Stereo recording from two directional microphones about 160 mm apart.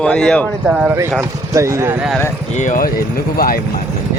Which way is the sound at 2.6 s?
55° left (ahead or behind).